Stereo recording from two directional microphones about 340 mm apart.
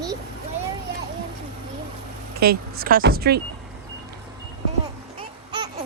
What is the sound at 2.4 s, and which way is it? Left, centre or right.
Speech, right.